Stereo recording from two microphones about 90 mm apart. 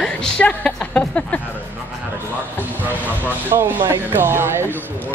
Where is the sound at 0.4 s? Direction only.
10° left (ahead or behind).